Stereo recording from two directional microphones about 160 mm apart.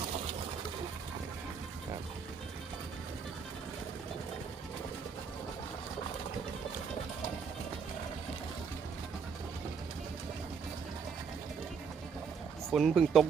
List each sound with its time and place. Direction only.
12.7 s speech: centre (ahead or behind)